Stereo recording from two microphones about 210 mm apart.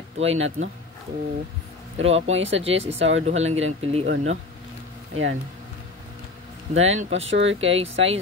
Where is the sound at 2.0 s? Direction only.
30° right (ahead or behind).